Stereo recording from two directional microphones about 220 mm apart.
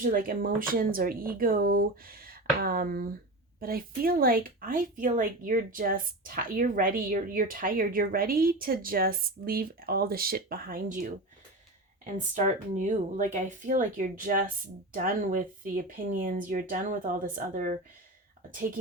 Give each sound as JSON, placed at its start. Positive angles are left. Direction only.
{"t": 0.0, "sound": "speech", "side_deg": -40}